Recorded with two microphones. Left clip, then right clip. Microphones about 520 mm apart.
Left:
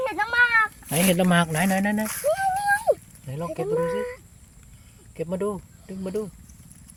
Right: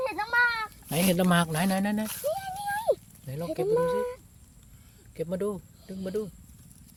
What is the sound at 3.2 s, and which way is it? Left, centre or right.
Speech, right.